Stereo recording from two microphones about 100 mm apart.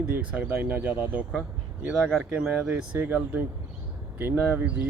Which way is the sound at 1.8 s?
5° right (ahead or behind).